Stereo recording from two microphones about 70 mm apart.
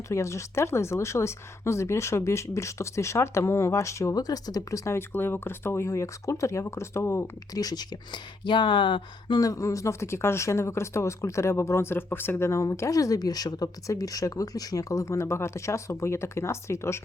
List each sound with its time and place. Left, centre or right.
0.1 s speech: left
4.1 s speech: left
4.9 s speech: left
7.5 s speech: left
9.4 s speech: left